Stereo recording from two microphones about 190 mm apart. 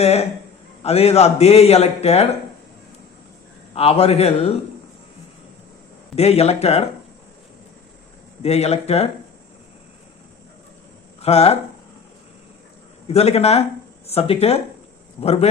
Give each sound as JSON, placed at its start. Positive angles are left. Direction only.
{"t": 0.0, "sound": "a man's voice", "side_deg": 35}
{"t": 3.8, "sound": "a man's voice", "side_deg": 30}
{"t": 6.1, "sound": "a man's voice", "side_deg": 35}
{"t": 8.4, "sound": "a man's voice", "side_deg": 35}
{"t": 11.2, "sound": "speech", "side_deg": 35}
{"t": 13.1, "sound": "a man's voice", "side_deg": 35}